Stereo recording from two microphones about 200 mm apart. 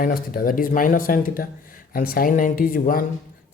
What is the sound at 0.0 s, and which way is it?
Speech, 45° left (ahead or behind).